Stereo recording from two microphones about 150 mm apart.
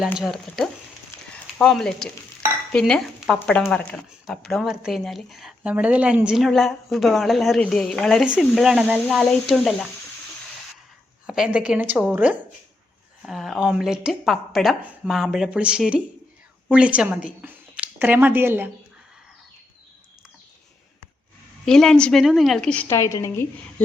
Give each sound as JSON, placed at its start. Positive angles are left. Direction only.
{"t": 0.0, "sound": "speech", "side_deg": 0}
{"t": 11.3, "sound": "speech", "side_deg": -5}
{"t": 13.2, "sound": "speech", "side_deg": 0}
{"t": 21.6, "sound": "speech", "side_deg": 5}
{"t": 22.9, "sound": "a woman's voice", "side_deg": 20}